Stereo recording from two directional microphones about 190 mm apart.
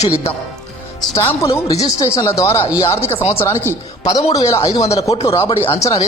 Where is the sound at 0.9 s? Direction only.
15° left (ahead or behind).